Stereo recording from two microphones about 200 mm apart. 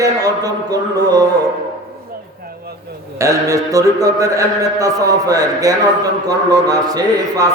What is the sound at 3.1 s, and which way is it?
Mantra, 15° right (ahead or behind).